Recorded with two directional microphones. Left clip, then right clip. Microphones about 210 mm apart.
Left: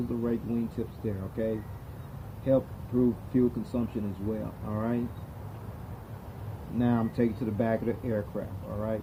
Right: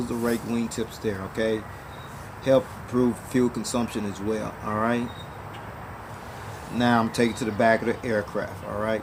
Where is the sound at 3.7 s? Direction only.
15° right (ahead or behind).